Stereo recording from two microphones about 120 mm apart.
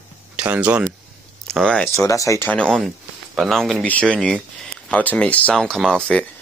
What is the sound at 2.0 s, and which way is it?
Speech, 25° left (ahead or behind).